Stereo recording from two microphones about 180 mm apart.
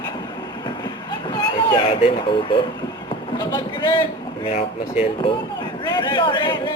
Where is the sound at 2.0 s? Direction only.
30° left (ahead or behind).